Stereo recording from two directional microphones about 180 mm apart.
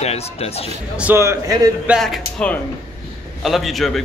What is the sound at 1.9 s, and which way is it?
A man's voice, centre (ahead or behind).